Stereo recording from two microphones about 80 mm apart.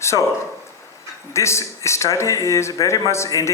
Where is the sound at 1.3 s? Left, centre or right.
Left.